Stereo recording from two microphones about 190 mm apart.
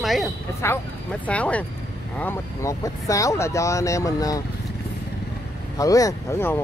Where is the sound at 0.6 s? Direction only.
15° left (ahead or behind).